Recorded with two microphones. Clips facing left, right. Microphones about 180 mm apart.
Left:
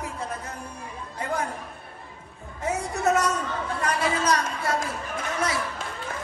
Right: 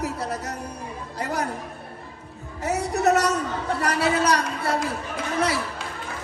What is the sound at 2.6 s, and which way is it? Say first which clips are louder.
Music: right 3 dB; 70° right (ahead or behind).